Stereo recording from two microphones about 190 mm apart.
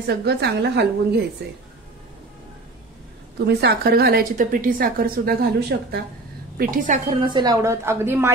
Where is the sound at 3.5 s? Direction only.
60° right (ahead or behind).